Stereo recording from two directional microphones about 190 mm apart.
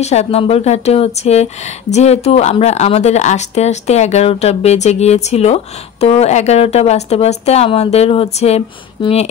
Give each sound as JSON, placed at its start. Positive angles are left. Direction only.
{"t": 0.0, "sound": "speech", "side_deg": 35}